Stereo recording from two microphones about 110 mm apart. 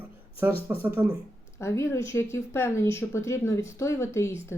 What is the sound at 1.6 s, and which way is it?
Speech, 25° left (ahead or behind).